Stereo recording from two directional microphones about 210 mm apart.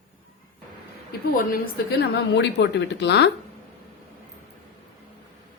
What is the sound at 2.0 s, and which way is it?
A woman's voice, 55° left (ahead or behind).